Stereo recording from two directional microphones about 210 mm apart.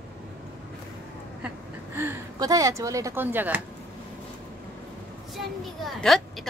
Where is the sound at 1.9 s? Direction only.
15° right (ahead or behind).